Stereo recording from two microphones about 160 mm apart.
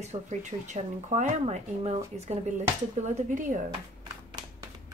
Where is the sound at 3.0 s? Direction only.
50° right (ahead or behind).